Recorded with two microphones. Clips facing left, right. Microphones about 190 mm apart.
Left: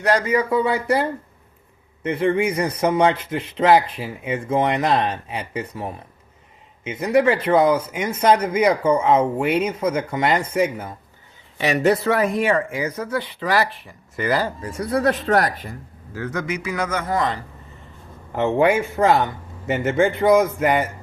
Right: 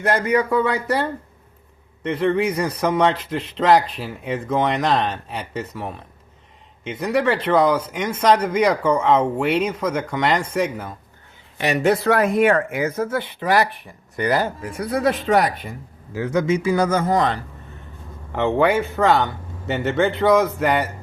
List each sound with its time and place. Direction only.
0.0 s speech: 55° right (ahead or behind)
2.0 s speech: 10° left (ahead or behind)
12.4 s speech: 55° right (ahead or behind)
13.0 s speech: 25° right (ahead or behind)
14.6 s speech: centre (ahead or behind)
16.1 s speech: 15° right (ahead or behind)
16.5 s speech: 30° right (ahead or behind)
18.3 s a man's voice: 5° left (ahead or behind)